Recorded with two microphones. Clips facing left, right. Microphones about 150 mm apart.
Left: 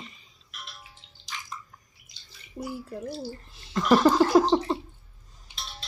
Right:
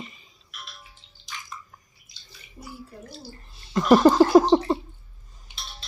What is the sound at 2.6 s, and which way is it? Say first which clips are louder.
Speech: left 8 dB; 70° left (ahead or behind).